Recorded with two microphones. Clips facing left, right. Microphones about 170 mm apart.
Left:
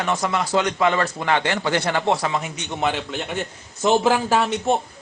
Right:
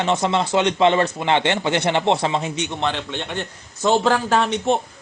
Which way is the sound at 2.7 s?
5° left (ahead or behind).